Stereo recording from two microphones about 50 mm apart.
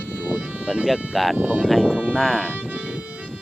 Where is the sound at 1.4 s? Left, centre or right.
Right.